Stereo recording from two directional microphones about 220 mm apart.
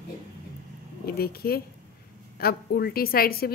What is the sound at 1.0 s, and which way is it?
A woman's voice, 45° left (ahead or behind).